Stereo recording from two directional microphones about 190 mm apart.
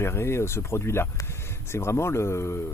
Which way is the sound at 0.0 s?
15° left (ahead or behind).